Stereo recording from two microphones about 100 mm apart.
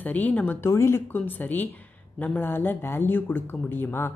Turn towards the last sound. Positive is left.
turn(degrees=20)  # may be behind; listen again after turning